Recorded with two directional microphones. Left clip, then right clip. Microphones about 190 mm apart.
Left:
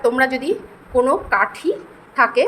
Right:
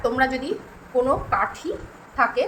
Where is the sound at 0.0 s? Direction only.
40° left (ahead or behind).